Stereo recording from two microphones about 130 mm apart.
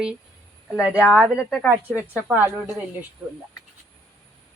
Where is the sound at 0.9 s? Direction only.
20° left (ahead or behind).